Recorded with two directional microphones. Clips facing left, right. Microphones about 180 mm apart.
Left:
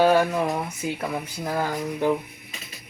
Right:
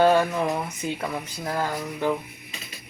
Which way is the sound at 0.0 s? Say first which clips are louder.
Even; 5° left (ahead or behind).